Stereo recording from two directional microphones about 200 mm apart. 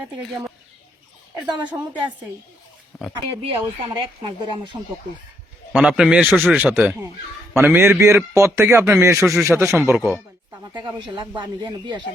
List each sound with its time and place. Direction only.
1.5 s speech: 20° right (ahead or behind)
2.9 s a sound: 5° left (ahead or behind)
3.4 s speech: 30° right (ahead or behind)
5.7 s a man's voice: 5° right (ahead or behind)
10.6 s a sound: 20° right (ahead or behind)
11.1 s speech: 25° right (ahead or behind)